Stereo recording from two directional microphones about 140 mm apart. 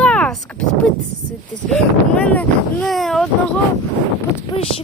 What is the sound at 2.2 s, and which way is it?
Speech, 10° left (ahead or behind).